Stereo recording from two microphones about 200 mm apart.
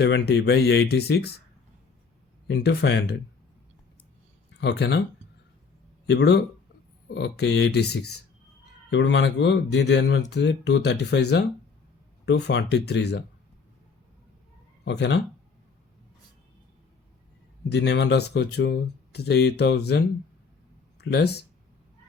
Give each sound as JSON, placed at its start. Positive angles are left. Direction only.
{"t": 0.0, "sound": "speech", "side_deg": 55}
{"t": 2.5, "sound": "speech", "side_deg": 55}
{"t": 4.6, "sound": "speech", "side_deg": 55}
{"t": 6.1, "sound": "speech", "side_deg": 60}
{"t": 14.8, "sound": "speech", "side_deg": 60}
{"t": 17.7, "sound": "speech", "side_deg": 60}
{"t": 21.0, "sound": "speech", "side_deg": 55}